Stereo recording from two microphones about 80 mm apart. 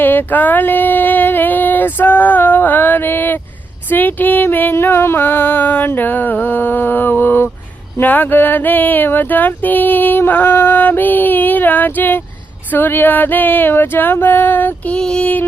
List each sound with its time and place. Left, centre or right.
0.0 s a sound: left
3.8 s speech: left
14.9 s music: centre